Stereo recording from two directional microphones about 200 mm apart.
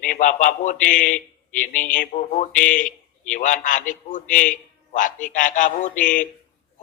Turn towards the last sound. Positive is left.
turn(degrees=40)  # may be behind; listen again after turning